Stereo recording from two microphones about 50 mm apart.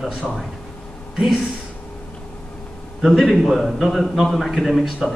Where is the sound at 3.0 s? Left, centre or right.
Centre.